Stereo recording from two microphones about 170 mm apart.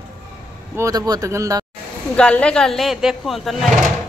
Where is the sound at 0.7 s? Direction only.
20° right (ahead or behind).